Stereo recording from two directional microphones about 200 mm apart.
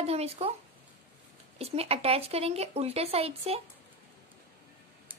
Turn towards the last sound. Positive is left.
turn(degrees=-30)  # may be behind; listen again after turning